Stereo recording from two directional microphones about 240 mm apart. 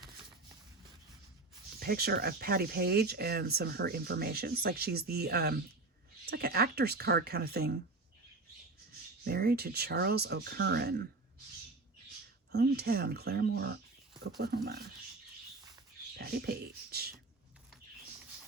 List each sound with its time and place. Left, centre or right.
1.8 s speech: right
9.2 s speech: right
12.5 s speech: right
16.1 s a sound: right